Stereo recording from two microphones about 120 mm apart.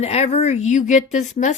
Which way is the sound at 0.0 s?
60° left (ahead or behind).